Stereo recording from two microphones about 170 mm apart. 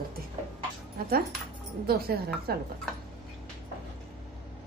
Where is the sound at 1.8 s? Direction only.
65° right (ahead or behind).